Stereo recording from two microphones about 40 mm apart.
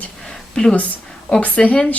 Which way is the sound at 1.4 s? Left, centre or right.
Left.